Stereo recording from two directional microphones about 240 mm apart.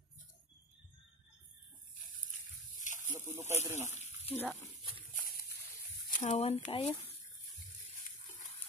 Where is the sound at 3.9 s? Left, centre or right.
Left.